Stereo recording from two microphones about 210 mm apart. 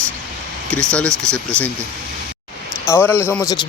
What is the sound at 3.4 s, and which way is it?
Speech, 20° left (ahead or behind).